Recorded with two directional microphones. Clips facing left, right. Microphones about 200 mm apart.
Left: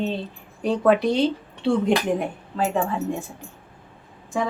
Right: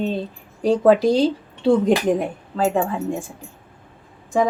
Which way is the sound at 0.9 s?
30° right (ahead or behind).